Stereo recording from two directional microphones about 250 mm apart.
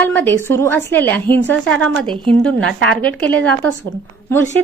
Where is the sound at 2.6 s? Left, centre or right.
Right.